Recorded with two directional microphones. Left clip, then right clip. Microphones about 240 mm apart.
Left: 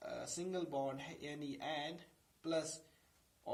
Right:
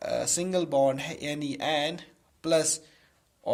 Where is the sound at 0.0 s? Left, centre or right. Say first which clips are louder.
Right 16 dB; right.